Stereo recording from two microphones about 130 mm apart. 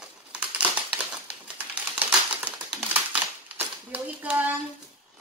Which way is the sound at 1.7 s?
10° right (ahead or behind).